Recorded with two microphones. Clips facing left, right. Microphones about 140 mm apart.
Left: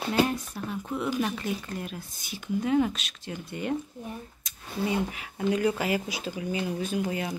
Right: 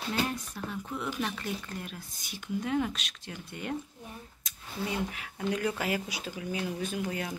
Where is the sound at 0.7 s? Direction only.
10° left (ahead or behind).